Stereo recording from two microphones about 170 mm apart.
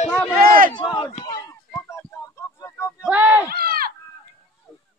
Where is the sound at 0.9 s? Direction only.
20° left (ahead or behind).